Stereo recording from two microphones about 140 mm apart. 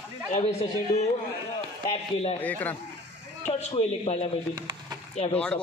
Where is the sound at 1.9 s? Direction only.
45° left (ahead or behind).